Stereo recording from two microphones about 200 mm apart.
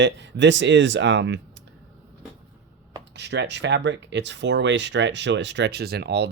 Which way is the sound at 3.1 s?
60° right (ahead or behind).